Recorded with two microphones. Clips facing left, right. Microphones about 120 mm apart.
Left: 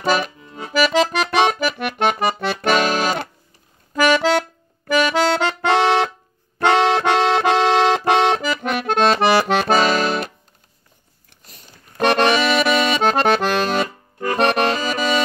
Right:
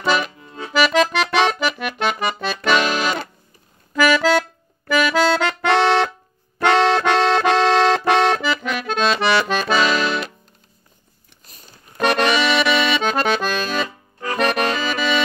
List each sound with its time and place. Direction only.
0.0 s accordion: 40° left (ahead or behind)
0.9 s music: 35° left (ahead or behind)
1.6 s accordion: 50° left (ahead or behind)
2.4 s accordion: 60° left (ahead or behind)
2.7 s music: 45° left (ahead or behind)
3.9 s accordion: 30° left (ahead or behind)
5.8 s music: 15° left (ahead or behind)
6.6 s accordion: 15° left (ahead or behind)
8.6 s accordion: 55° left (ahead or behind); by 9.5 s 40° left (ahead or behind)
9.5 s accordion: 60° left (ahead or behind)
9.8 s accordion: 45° left (ahead or behind)
12.0 s accordion: 40° left (ahead or behind)
13.4 s accordion: 60° left (ahead or behind)
14.3 s accordion: 35° left (ahead or behind)